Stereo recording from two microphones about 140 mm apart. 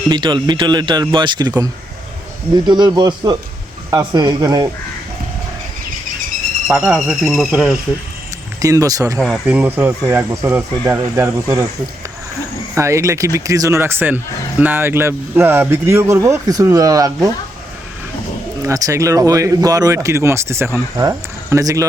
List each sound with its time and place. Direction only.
0.1 s speech: 35° right (ahead or behind)
6.7 s speech: 5° right (ahead or behind)
8.6 s speech: 25° right (ahead or behind)
9.1 s speech: 5° left (ahead or behind)
9.5 s speech: 15° right (ahead or behind)
12.7 s speech: 20° right (ahead or behind)
18.6 s speech: 25° right (ahead or behind)